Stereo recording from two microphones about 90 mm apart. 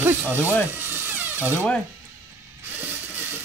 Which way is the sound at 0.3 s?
25° right (ahead or behind).